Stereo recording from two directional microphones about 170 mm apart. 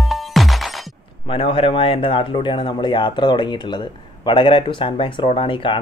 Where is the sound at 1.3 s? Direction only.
30° left (ahead or behind).